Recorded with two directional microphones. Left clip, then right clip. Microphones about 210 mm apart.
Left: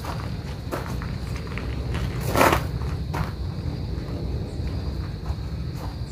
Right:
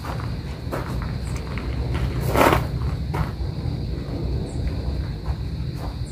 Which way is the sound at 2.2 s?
50° left (ahead or behind).